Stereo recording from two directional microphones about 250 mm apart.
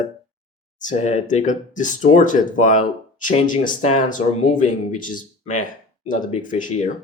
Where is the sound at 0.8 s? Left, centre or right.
Left.